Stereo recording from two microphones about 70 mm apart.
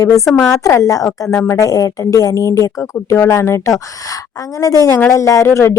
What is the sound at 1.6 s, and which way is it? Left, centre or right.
A woman's voice, left.